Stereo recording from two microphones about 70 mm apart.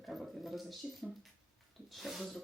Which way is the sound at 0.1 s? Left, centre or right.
Centre.